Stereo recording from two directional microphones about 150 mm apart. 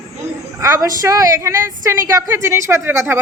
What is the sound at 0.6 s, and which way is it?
A woman's voice, 20° right (ahead or behind).